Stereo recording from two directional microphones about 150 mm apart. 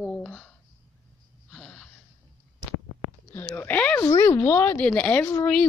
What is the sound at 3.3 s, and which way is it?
A child's voice, 20° left (ahead or behind).